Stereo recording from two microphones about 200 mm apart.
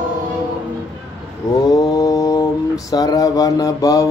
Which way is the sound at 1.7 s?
15° left (ahead or behind).